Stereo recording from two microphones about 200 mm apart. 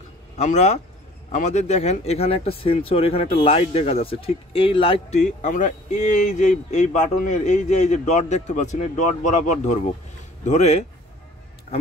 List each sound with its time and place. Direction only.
0.4 s speech: 35° left (ahead or behind)